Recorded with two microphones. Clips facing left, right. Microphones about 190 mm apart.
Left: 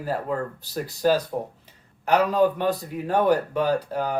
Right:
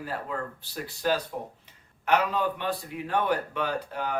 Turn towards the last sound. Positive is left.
turn(degrees=40)  # may be behind; listen again after turning